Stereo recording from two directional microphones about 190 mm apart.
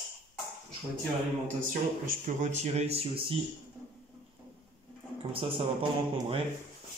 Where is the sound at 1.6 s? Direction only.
45° right (ahead or behind); by 3.3 s 30° right (ahead or behind).